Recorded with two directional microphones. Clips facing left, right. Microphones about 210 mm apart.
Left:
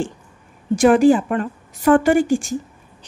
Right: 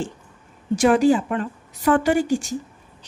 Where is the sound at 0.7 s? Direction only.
50° left (ahead or behind).